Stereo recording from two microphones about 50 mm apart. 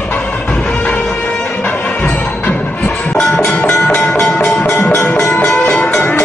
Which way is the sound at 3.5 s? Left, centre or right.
Left.